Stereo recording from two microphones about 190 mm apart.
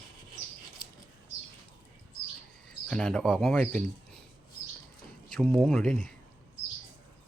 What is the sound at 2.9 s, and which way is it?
Speech, 5° left (ahead or behind).